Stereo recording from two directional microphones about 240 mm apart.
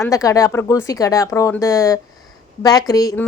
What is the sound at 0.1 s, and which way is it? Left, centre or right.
A woman's voice, centre.